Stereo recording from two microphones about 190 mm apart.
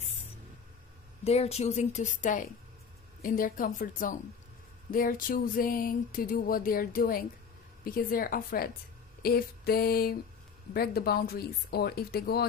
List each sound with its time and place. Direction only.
1.2 s a woman's voice: 35° left (ahead or behind)
3.2 s a sound: 45° left (ahead or behind)
10.7 s speech: 55° left (ahead or behind)